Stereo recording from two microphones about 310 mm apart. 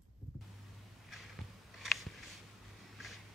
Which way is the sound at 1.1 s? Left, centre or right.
Centre.